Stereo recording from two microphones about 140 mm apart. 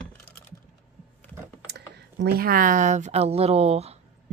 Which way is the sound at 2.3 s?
90° right.